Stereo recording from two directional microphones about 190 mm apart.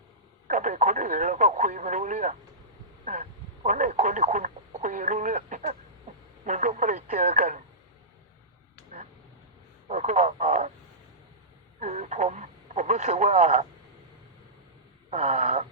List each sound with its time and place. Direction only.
0.4 s speech: 40° right (ahead or behind)
9.9 s speech: 40° right (ahead or behind)
11.8 s speech: 40° right (ahead or behind)
15.1 s speech: 35° right (ahead or behind)